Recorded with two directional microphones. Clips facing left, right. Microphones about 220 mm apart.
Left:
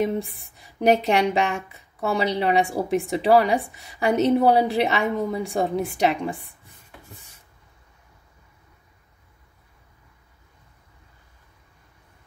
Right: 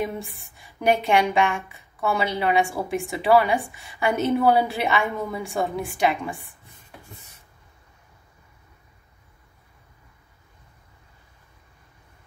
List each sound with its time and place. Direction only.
0.0 s a woman's voice: 40° left (ahead or behind)